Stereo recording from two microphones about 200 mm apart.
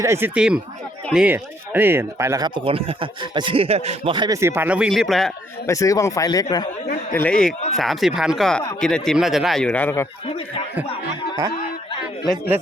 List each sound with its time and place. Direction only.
0.0 s speech: 10° right (ahead or behind)
5.6 s speech: 15° left (ahead or behind)
7.1 s speech: 10° left (ahead or behind)
10.2 s speech: 30° left (ahead or behind)